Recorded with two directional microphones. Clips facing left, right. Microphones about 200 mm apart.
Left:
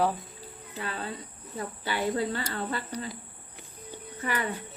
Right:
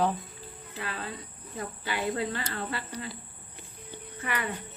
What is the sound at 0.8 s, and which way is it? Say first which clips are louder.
Speech: left 2 dB; 30° left (ahead or behind).